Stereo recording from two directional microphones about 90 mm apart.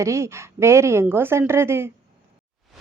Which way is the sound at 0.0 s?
35° right (ahead or behind).